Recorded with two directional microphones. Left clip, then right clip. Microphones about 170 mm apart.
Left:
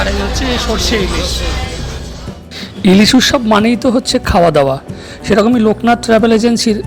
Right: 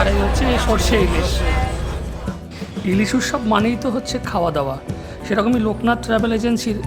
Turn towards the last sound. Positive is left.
turn(degrees=30)  # may be behind; listen again after turning